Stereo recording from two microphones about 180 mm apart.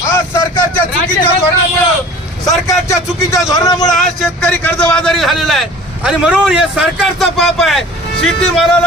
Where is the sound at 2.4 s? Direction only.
15° left (ahead or behind).